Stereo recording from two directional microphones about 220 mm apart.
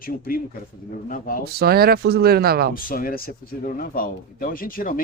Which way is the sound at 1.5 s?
45° right (ahead or behind).